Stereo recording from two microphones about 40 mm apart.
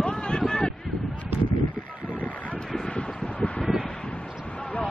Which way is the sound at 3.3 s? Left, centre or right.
Left.